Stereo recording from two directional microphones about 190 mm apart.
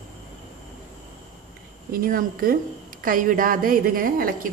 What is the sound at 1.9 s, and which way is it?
Speech, 50° right (ahead or behind).